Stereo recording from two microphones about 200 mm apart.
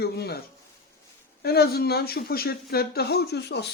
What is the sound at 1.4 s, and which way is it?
Speech, 50° left (ahead or behind).